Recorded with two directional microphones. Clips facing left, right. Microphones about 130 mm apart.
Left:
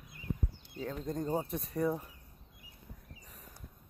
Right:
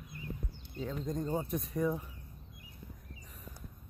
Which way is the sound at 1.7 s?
35° left (ahead or behind).